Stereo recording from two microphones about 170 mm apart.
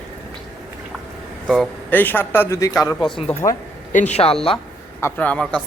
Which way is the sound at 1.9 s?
10° left (ahead or behind).